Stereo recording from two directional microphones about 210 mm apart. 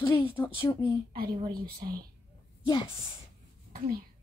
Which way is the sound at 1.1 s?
45° right (ahead or behind).